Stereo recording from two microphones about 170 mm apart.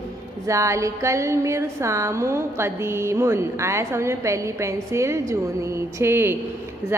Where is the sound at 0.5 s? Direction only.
20° right (ahead or behind).